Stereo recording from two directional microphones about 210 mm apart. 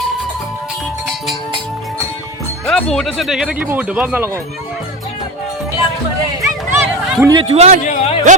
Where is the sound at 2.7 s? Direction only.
Centre (ahead or behind).